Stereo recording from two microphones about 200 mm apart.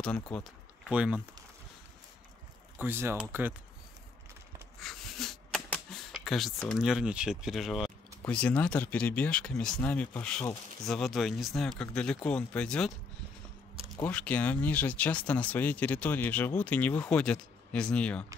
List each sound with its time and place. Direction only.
0.0 s speech: 5° left (ahead or behind)
2.8 s speech: 10° right (ahead or behind)
4.7 s a sound: centre (ahead or behind)
8.3 s speech: 5° left (ahead or behind)
13.9 s speech: 5° left (ahead or behind)